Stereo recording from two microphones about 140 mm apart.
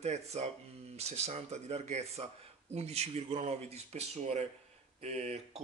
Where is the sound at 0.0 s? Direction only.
50° right (ahead or behind).